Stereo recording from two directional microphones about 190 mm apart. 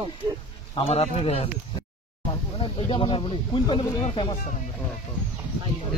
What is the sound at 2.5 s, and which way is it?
Speech, 30° left (ahead or behind).